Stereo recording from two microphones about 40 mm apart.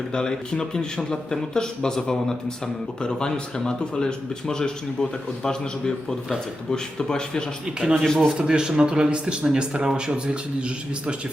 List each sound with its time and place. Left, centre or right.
0.1 s speech: centre
8.4 s a man's voice: centre